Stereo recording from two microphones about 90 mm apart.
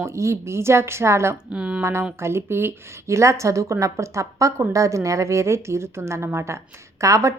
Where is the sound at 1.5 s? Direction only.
10° right (ahead or behind).